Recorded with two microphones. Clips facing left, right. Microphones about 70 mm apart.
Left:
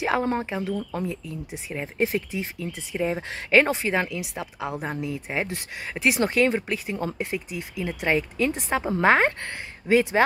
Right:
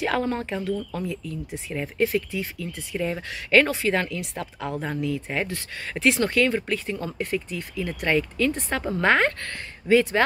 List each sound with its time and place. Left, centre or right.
0.0 s speech: left
4.8 s speech: left